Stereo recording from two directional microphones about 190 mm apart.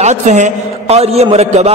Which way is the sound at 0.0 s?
40° right (ahead or behind).